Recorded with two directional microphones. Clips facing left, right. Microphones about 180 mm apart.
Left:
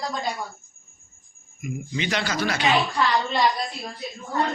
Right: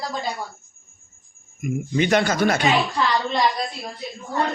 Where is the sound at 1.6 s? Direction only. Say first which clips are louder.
Right 8 dB; 50° right (ahead or behind).